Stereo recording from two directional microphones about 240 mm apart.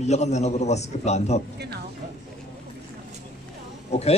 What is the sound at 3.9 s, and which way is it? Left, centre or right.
Speech, left.